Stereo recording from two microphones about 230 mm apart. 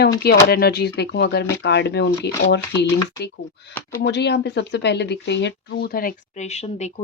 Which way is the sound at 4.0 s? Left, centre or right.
Left.